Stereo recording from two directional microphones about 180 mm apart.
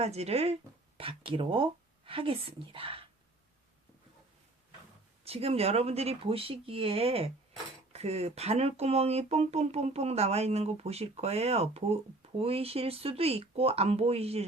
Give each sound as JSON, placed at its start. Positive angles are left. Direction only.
{"t": 0.0, "sound": "speech", "side_deg": -35}
{"t": 5.2, "sound": "speech", "side_deg": -35}